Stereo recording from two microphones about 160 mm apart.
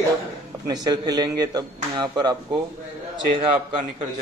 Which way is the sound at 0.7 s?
25° right (ahead or behind).